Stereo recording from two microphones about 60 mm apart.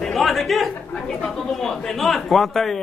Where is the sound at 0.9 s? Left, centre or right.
Centre.